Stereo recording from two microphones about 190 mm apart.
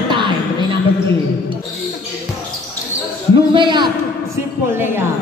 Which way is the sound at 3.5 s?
25° right (ahead or behind).